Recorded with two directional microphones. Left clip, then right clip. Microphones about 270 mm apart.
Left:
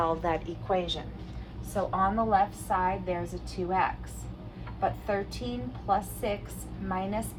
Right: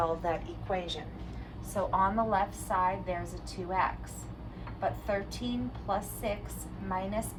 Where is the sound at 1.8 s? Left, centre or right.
Centre.